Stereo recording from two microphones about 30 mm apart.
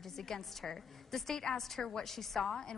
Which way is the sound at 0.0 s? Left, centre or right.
Centre.